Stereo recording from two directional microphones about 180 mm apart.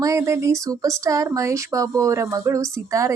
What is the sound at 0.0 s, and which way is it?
Speech, 15° right (ahead or behind).